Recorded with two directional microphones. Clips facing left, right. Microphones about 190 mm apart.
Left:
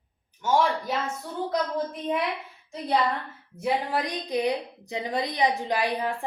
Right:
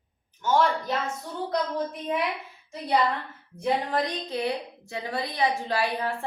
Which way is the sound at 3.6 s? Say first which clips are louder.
Right 1 dB; 10° left (ahead or behind).